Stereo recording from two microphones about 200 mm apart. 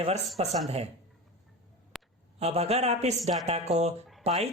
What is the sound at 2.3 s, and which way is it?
Speech, 30° right (ahead or behind).